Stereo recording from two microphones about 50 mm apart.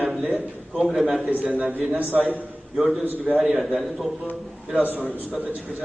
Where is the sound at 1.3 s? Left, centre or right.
Right.